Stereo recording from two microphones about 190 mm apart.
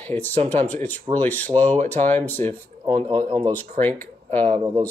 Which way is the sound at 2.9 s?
30° right (ahead or behind).